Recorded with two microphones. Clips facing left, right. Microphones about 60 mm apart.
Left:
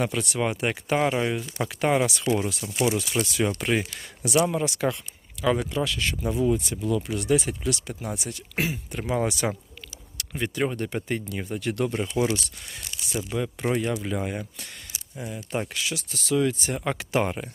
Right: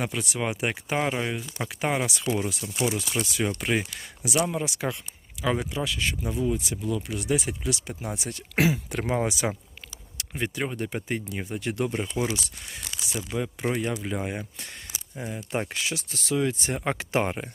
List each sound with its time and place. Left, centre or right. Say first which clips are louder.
0.0 s speech: left 3 dB; centre; by 8.3 s right
8.5 s speech: right 5 dB; right
9.1 s speech: left 2 dB; centre
10.2 s a sound: left 1 dB; centre
10.8 s speech: left 1 dB; centre
13.3 s speech: left 2 dB; centre
15.3 s speech: even; right